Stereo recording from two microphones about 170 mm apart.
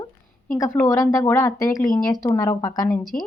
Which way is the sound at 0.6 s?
15° left (ahead or behind).